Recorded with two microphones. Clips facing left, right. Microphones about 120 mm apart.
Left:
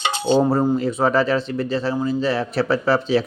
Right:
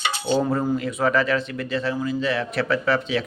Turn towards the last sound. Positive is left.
turn(degrees=30)  # may be behind; listen again after turning